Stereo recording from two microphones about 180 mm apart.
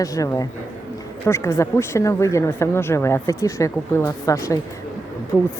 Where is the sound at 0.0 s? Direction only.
20° left (ahead or behind).